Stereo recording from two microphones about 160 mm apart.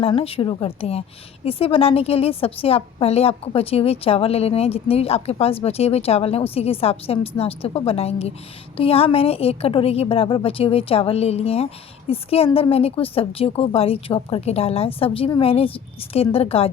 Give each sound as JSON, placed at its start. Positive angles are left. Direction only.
{"t": 0.0, "sound": "a woman's voice", "side_deg": 35}